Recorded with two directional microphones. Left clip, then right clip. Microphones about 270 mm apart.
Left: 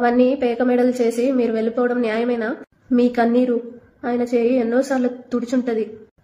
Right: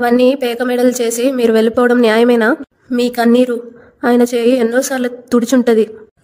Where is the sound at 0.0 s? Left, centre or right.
Right.